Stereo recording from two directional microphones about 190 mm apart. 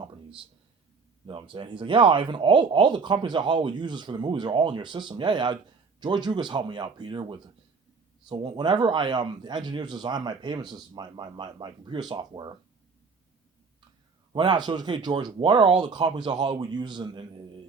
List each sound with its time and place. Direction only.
1.3 s speech: 25° right (ahead or behind)
14.3 s speech: 20° right (ahead or behind)